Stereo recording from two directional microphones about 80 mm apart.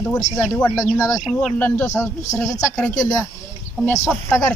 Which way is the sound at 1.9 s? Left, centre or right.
Left.